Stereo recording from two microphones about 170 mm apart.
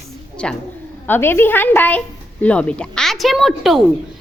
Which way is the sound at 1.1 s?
15° left (ahead or behind).